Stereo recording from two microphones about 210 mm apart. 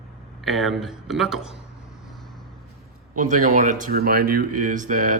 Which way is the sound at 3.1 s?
35° right (ahead or behind).